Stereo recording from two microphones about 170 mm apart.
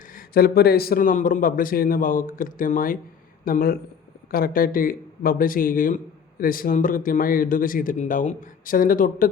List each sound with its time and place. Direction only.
0.1 s speech: 60° left (ahead or behind)